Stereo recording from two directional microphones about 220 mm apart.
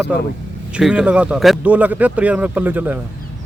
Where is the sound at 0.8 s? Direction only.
5° right (ahead or behind).